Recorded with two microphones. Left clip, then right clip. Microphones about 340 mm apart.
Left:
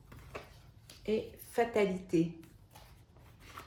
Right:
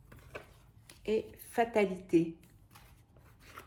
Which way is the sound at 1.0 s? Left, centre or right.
Right.